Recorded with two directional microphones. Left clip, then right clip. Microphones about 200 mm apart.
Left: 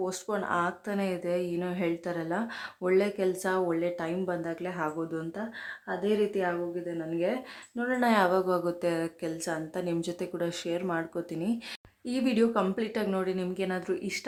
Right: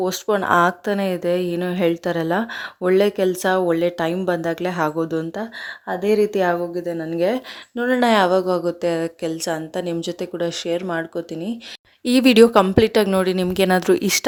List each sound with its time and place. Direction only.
0.0 s speech: 35° right (ahead or behind)
12.0 s a woman's voice: 45° right (ahead or behind)